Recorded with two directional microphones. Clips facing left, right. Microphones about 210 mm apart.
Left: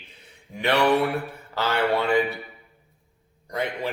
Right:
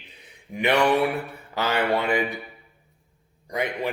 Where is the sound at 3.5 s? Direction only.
15° right (ahead or behind).